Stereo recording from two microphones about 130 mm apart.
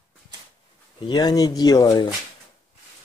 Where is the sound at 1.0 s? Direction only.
35° left (ahead or behind).